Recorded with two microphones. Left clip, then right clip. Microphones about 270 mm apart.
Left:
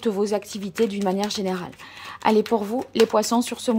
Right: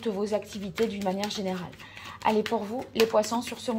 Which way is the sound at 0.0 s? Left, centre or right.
Left.